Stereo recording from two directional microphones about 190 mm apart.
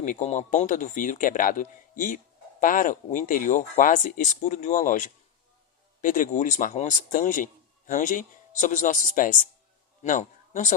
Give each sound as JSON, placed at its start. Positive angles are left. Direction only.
{"t": 0.0, "sound": "a man's voice", "side_deg": 40}